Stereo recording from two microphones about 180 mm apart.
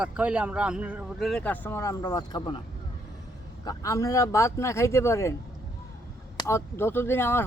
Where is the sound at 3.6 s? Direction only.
20° left (ahead or behind).